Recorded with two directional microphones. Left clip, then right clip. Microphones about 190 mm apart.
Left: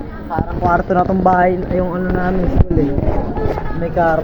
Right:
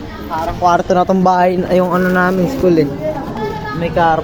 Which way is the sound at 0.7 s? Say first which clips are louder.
Right 2 dB; 25° right (ahead or behind).